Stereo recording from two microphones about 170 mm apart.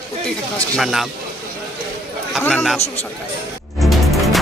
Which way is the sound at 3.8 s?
Centre (ahead or behind).